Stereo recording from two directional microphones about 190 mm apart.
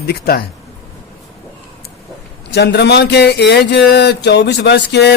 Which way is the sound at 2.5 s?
60° left (ahead or behind).